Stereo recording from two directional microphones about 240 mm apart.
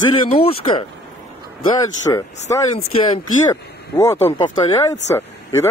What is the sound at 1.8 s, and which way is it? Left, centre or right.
Speech, centre.